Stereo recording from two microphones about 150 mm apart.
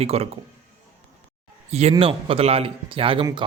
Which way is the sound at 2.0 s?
40° right (ahead or behind).